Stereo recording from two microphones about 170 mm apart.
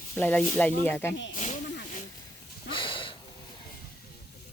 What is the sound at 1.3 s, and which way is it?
Snake, 45° left (ahead or behind).